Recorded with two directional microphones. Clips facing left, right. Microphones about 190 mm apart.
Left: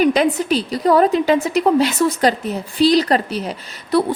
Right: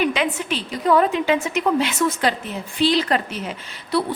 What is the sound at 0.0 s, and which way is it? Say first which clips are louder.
A woman's voice: left 6 dB; 40° left (ahead or behind).